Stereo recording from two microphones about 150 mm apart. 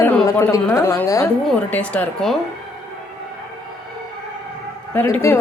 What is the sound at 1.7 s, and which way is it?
Speech, 10° left (ahead or behind).